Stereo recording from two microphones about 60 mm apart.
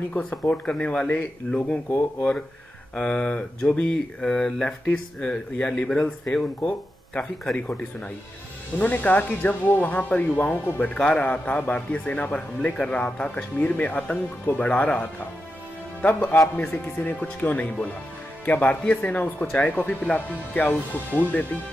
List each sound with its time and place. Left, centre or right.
0.5 s a man's voice: left
2.9 s speech: centre
7.5 s a man's voice: left